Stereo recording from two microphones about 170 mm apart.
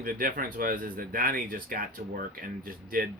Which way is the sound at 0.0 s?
55° right (ahead or behind).